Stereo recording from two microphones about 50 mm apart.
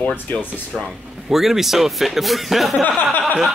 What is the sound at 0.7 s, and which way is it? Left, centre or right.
Speech, centre.